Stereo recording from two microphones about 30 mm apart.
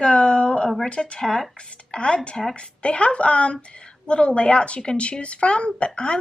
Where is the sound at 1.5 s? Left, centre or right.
Left.